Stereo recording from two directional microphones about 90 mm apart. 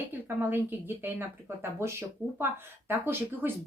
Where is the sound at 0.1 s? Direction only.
20° right (ahead or behind).